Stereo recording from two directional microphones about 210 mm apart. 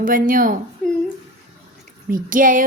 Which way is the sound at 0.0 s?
40° right (ahead or behind).